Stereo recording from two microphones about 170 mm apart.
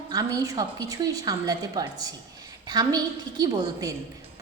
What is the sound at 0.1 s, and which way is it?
A woman's voice, 20° right (ahead or behind).